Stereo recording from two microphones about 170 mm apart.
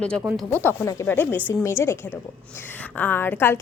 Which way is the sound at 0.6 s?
15° left (ahead or behind).